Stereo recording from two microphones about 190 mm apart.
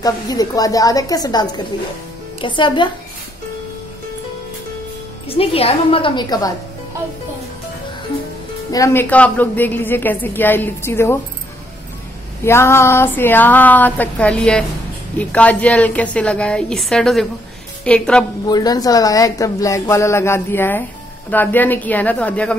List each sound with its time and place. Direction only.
0.0 s a woman's voice: 20° left (ahead or behind)
5.3 s a woman's voice: 30° left (ahead or behind)
8.7 s a woman's voice: 15° left (ahead or behind)
12.4 s a woman's voice: 15° left (ahead or behind)
18.5 s a woman's voice: 20° left (ahead or behind)